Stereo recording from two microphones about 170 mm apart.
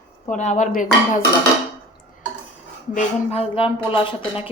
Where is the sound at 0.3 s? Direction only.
45° left (ahead or behind).